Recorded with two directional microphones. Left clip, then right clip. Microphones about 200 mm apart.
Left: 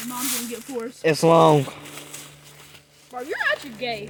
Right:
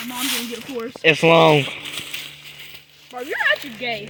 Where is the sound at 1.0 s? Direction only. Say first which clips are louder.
Right 3 dB; centre (ahead or behind).